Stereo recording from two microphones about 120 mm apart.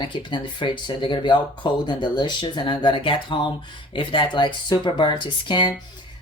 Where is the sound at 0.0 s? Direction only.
40° left (ahead or behind).